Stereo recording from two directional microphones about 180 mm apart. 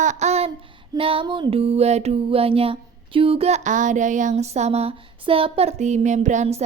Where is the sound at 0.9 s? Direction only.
30° right (ahead or behind).